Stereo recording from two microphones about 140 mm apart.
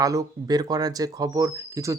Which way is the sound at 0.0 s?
25° right (ahead or behind).